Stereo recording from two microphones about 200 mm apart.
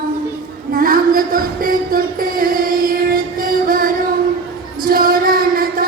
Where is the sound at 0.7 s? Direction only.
45° right (ahead or behind).